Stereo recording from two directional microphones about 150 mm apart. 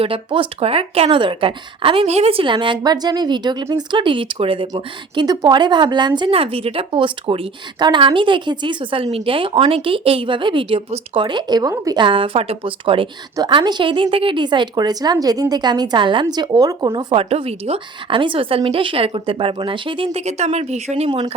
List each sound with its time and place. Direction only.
0.0 s a woman's voice: 35° right (ahead or behind)
4.7 s a woman's voice: 25° right (ahead or behind); by 21.1 s 45° right (ahead or behind)
21.1 s a woman's voice: 35° right (ahead or behind)